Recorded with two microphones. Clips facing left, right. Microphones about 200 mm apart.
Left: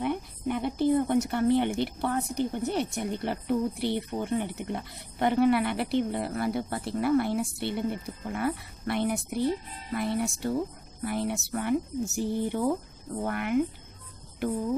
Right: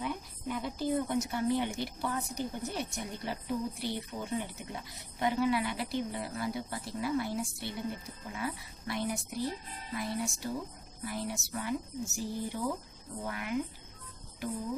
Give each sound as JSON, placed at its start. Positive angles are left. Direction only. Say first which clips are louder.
{"t": 0.0, "sound": "speech", "louder": "left 7 dB", "side_deg": 60}